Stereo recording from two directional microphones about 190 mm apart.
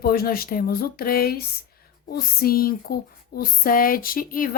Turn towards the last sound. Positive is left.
turn(degrees=50)  # may be behind; listen again after turning